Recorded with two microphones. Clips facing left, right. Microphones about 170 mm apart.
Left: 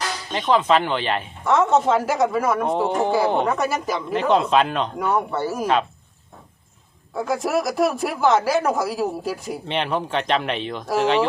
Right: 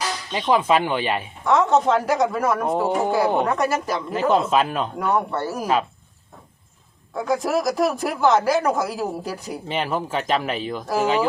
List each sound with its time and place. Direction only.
0.3 s speech: 10° right (ahead or behind)
1.5 s speech: centre (ahead or behind)
7.1 s speech: centre (ahead or behind)